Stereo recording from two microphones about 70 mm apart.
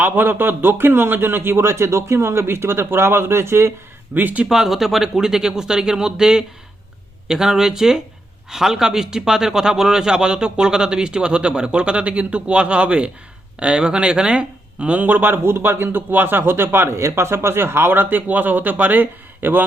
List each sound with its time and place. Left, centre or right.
0.0 s a man's voice: right
4.1 s speech: right
4.4 s a man's voice: centre; by 19.6 s right